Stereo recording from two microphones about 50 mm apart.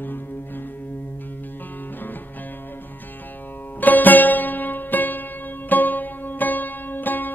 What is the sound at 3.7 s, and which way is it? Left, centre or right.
Music, left.